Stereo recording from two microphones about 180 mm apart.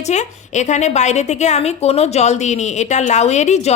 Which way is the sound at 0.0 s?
40° left (ahead or behind).